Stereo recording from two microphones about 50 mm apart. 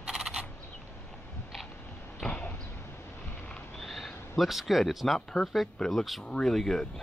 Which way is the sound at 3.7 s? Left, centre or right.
Centre.